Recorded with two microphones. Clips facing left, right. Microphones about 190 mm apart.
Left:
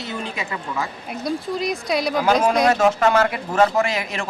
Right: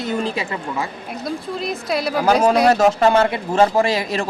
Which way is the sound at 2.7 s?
40° right (ahead or behind).